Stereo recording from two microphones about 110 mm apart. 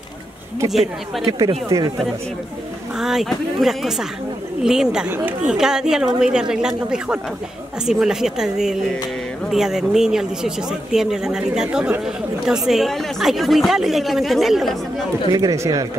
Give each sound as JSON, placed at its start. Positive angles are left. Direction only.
{"t": 0.7, "sound": "speech", "side_deg": 0}
{"t": 1.7, "sound": "speech", "side_deg": -30}
{"t": 3.0, "sound": "speech", "side_deg": -5}
{"t": 7.8, "sound": "speech", "side_deg": -5}
{"t": 15.3, "sound": "speech", "side_deg": -30}